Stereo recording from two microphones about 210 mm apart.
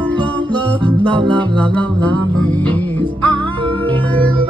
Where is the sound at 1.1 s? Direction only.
25° right (ahead or behind).